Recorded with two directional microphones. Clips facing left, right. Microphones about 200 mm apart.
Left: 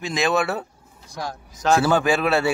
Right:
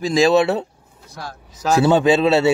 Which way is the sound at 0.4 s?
25° right (ahead or behind).